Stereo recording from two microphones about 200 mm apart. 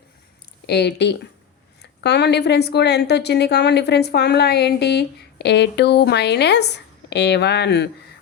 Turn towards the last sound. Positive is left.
turn(degrees=60)  # may be behind; listen again after turning